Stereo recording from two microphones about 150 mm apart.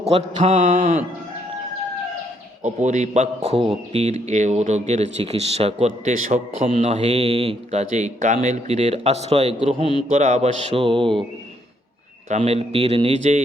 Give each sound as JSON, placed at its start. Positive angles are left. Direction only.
{"t": 0.0, "sound": "speech", "side_deg": -45}
{"t": 2.6, "sound": "speech", "side_deg": -50}
{"t": 10.8, "sound": "speech", "side_deg": -35}
{"t": 12.4, "sound": "speech", "side_deg": -40}